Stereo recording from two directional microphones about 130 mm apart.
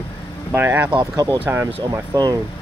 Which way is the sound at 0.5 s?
15° right (ahead or behind).